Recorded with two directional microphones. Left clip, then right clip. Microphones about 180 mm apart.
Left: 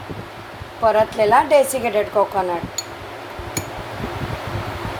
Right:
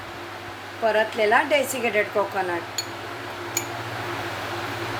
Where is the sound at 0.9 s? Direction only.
20° left (ahead or behind).